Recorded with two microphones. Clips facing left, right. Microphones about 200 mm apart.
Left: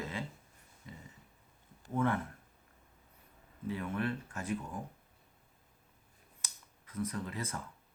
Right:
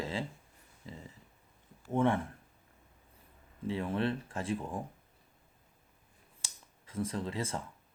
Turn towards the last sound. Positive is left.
turn(degrees=-25)  # may be behind; listen again after turning